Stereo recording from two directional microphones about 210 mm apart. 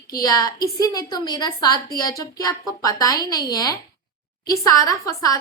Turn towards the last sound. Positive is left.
turn(degrees=15)  # may be behind; listen again after turning